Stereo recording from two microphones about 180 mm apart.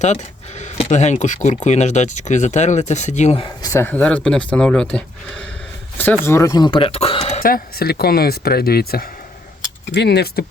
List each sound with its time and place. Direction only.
0.6 s speech: 40° left (ahead or behind)
3.6 s speech: 15° left (ahead or behind)
6.2 s speech: 15° left (ahead or behind); by 7.4 s 35° left (ahead or behind)
7.4 s speech: 55° left (ahead or behind)